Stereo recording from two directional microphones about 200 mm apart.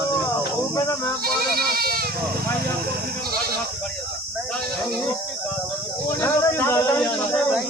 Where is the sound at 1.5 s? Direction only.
50° right (ahead or behind).